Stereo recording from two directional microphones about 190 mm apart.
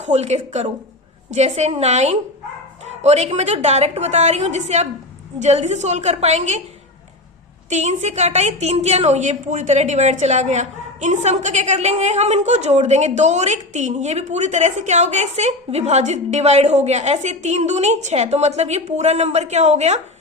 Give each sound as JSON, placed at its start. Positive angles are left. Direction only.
{"t": 0.0, "sound": "a woman's voice", "side_deg": -35}
{"t": 7.7, "sound": "a woman's voice", "side_deg": -35}